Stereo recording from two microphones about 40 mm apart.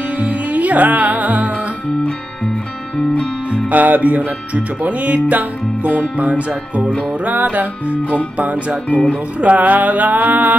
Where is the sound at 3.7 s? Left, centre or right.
Right.